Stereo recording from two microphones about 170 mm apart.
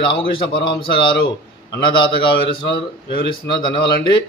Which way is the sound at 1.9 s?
30° left (ahead or behind).